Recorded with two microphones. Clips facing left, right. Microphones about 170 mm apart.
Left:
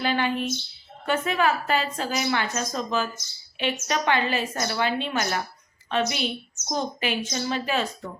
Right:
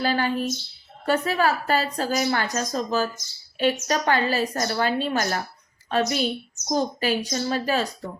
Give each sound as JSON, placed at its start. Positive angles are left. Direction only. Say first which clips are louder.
{"t": 0.0, "sound": "a woman's voice", "louder": "right 1 dB", "side_deg": -40}